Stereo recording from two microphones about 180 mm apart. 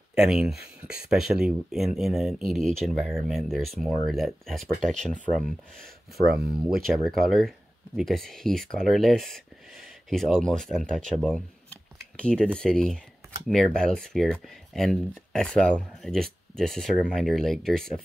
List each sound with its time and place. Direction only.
0.1 s speech: 5° right (ahead or behind)
6.7 s speech: centre (ahead or behind)
12.0 s a sound: 5° left (ahead or behind)
12.5 s speech: 5° left (ahead or behind)